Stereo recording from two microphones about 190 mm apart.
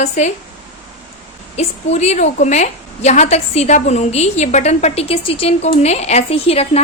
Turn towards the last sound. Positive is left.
turn(degrees=30)  # may be behind; listen again after turning